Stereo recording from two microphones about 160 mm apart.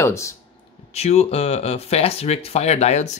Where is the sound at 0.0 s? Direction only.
20° left (ahead or behind).